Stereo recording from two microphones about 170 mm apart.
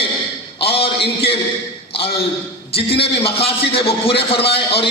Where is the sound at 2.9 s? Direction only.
35° left (ahead or behind).